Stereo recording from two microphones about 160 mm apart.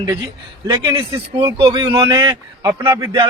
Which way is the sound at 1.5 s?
30° right (ahead or behind).